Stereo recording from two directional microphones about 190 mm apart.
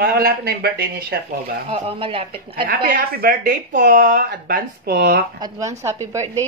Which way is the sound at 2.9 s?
50° right (ahead or behind).